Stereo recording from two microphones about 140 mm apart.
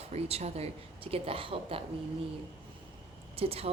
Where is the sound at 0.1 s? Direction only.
50° right (ahead or behind).